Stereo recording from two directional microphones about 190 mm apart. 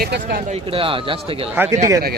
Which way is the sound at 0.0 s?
55° right (ahead or behind).